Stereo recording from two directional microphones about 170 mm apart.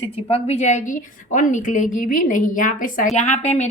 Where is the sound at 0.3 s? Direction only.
35° left (ahead or behind).